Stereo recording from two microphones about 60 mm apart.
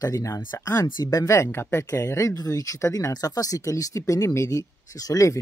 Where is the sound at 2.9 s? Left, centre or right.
Left.